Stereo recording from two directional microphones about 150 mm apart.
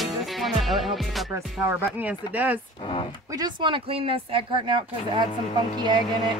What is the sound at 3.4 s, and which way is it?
Speech, 30° right (ahead or behind).